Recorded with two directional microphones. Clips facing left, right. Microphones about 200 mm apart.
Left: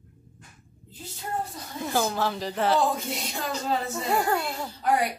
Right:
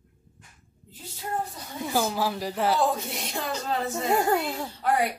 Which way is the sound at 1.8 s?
5° right (ahead or behind).